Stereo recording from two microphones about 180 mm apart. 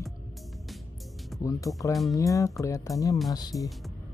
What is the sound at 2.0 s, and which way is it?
Speech, 20° left (ahead or behind).